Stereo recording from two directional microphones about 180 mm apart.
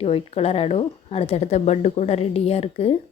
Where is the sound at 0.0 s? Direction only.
30° left (ahead or behind).